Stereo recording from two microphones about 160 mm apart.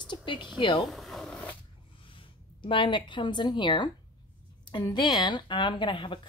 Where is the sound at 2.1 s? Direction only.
30° left (ahead or behind).